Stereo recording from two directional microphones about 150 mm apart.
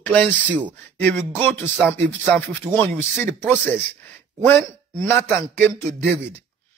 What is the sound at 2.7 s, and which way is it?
Speech, 10° left (ahead or behind).